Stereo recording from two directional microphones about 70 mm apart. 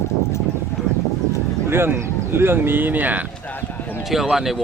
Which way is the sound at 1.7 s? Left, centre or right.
Right.